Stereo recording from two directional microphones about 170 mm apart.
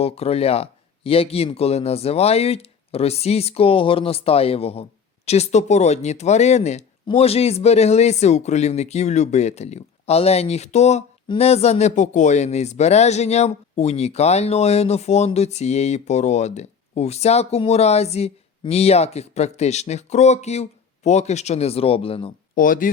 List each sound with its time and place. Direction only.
0.0 s speech: 35° left (ahead or behind)
22.5 s speech: 55° left (ahead or behind)